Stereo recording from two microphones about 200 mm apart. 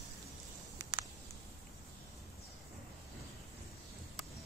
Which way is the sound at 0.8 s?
15° right (ahead or behind).